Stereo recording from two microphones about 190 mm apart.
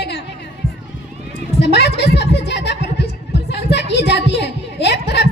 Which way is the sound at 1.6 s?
65° left (ahead or behind).